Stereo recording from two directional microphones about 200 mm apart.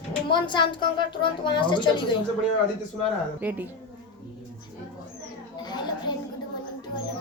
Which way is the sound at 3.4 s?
10° right (ahead or behind).